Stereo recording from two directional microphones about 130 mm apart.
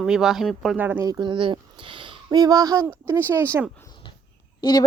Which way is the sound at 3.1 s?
15° right (ahead or behind).